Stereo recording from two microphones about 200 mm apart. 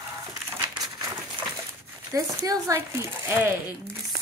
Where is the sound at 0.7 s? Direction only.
15° right (ahead or behind).